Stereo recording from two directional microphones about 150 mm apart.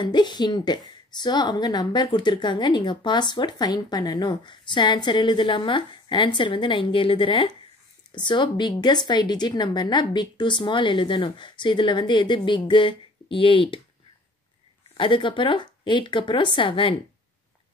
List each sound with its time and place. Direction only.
0.0 s a woman's voice: 30° left (ahead or behind)
15.0 s speech: 35° left (ahead or behind)